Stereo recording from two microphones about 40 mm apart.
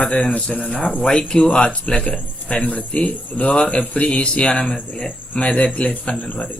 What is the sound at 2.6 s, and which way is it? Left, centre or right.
Speech, left.